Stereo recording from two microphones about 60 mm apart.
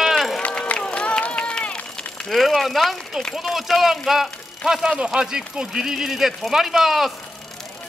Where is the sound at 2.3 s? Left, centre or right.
Centre.